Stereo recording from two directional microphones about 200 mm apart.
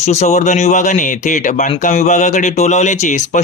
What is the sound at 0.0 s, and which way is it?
Speech, 35° left (ahead or behind).